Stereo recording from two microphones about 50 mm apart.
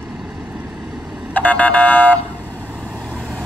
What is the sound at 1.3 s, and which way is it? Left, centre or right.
Car alarm, left.